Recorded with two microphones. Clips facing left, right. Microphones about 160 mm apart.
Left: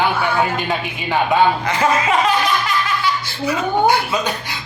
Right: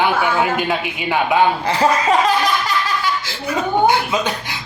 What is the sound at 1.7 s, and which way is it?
Laughter, 35° right (ahead or behind).